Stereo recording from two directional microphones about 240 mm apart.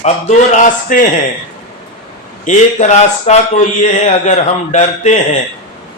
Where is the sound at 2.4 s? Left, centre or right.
Left.